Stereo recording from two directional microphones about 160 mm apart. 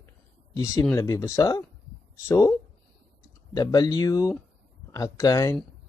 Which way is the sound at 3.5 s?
25° left (ahead or behind).